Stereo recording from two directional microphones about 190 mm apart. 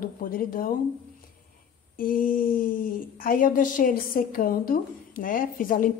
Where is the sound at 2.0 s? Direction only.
45° left (ahead or behind).